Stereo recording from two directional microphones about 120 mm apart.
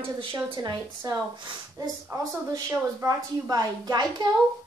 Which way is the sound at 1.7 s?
30° right (ahead or behind).